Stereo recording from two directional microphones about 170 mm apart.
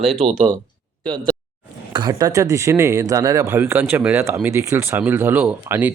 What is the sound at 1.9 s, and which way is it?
Speech, 25° right (ahead or behind).